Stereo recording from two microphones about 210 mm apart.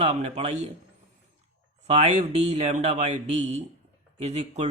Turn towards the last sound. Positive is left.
turn(degrees=-30)  # may be behind; listen again after turning